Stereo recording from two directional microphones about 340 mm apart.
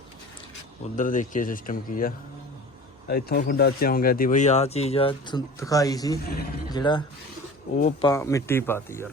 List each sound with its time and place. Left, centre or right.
0.9 s speech: left
6.2 s speech: left
6.7 s speech: centre
8.0 s speech: centre